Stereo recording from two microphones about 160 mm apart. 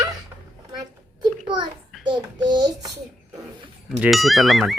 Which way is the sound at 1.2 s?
30° right (ahead or behind).